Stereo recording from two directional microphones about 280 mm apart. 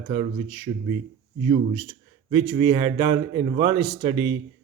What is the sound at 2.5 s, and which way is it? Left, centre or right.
A man's voice, centre.